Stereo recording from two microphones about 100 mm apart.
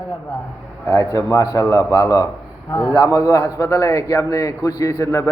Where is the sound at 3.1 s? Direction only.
35° left (ahead or behind).